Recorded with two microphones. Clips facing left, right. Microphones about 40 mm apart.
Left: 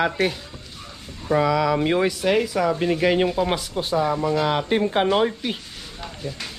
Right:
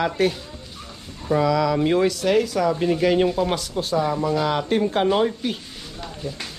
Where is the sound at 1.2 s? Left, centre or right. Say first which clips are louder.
Even; centre.